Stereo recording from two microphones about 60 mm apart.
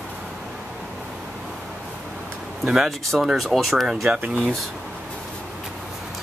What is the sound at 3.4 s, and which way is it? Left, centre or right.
Speech, centre.